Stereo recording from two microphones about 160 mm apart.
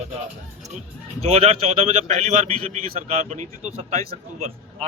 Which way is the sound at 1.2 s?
40° right (ahead or behind).